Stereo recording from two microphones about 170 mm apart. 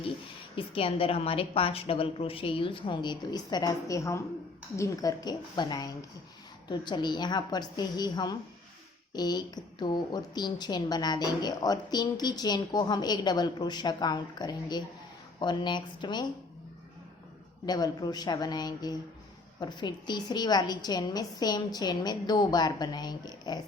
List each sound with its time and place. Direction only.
0.5 s a woman's voice: 35° left (ahead or behind)
17.7 s a woman's voice: 20° left (ahead or behind)